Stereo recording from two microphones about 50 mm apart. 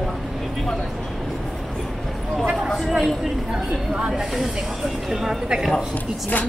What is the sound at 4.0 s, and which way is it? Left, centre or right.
Snake, centre.